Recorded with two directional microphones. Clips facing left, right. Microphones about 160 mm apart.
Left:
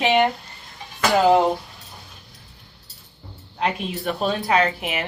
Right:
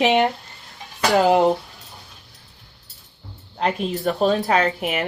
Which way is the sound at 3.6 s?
40° right (ahead or behind).